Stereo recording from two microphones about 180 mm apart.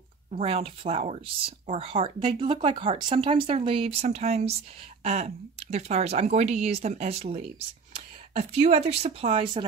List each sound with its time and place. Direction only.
0.3 s speech: 35° right (ahead or behind)